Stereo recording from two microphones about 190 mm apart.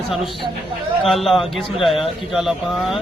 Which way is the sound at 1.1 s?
Centre (ahead or behind).